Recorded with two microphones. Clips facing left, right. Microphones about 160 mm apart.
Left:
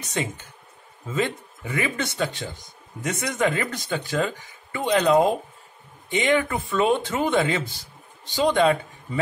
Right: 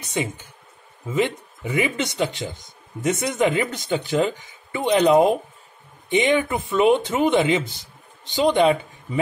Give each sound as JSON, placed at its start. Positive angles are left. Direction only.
{"t": 0.0, "sound": "speech", "side_deg": -15}